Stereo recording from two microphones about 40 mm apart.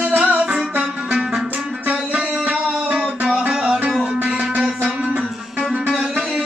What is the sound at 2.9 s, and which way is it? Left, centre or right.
Music, centre.